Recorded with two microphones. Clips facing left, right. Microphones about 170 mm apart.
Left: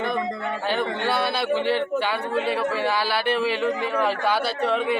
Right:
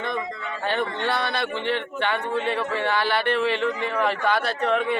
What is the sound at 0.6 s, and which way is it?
A man's voice, centre (ahead or behind).